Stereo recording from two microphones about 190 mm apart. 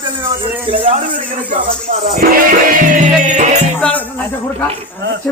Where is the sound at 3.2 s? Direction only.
40° right (ahead or behind).